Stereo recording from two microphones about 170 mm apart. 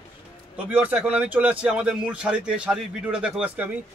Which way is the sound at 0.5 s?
5° right (ahead or behind).